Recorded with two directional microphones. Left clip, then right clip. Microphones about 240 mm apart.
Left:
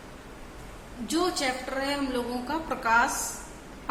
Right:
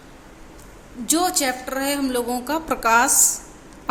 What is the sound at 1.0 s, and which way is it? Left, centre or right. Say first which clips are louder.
A woman's voice: right 6 dB; right.